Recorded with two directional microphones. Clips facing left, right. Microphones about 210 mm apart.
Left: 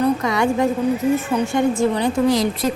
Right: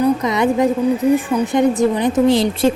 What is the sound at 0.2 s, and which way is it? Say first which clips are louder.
A woman's voice: right 3 dB; 20° right (ahead or behind).